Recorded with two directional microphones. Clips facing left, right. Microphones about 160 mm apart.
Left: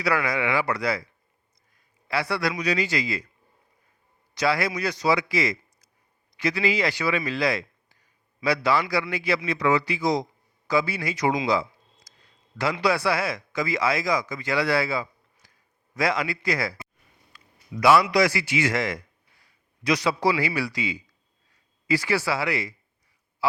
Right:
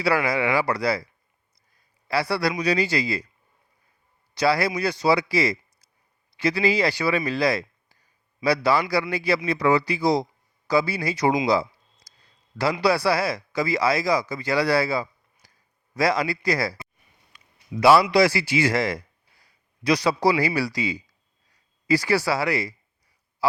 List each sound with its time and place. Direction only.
0.0 s a man's voice: 30° right (ahead or behind)
4.4 s a man's voice: 35° right (ahead or behind)
11.4 s a sound: 35° right (ahead or behind)
12.8 s speech: 35° right (ahead or behind)
17.3 s a sound: 30° right (ahead or behind)
18.1 s a man's voice: 30° right (ahead or behind)
23.4 s honk: 40° right (ahead or behind)